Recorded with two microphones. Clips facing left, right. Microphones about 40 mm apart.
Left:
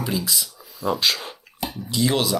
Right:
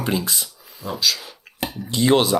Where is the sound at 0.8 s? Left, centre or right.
Left.